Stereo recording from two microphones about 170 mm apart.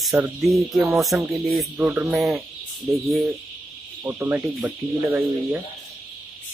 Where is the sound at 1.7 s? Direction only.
10° right (ahead or behind).